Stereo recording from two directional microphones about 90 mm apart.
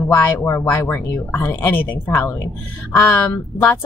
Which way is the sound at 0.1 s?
25° left (ahead or behind).